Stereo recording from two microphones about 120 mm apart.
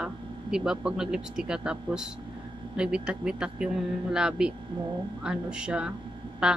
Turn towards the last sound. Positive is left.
turn(degrees=-5)  # may be behind; listen again after turning